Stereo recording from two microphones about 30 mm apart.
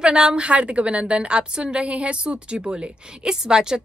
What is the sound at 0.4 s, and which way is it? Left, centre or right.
A woman's voice, right.